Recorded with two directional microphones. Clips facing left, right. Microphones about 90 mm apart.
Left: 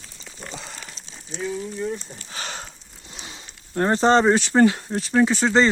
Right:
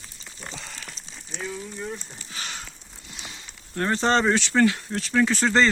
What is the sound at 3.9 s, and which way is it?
Speech, 20° left (ahead or behind).